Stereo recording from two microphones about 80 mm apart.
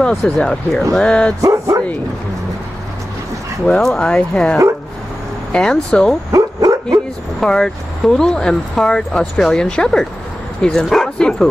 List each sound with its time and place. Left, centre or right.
0.0 s speech: centre
1.4 s speech: right
3.6 s speech: centre
6.3 s dog: right
7.3 s speech: centre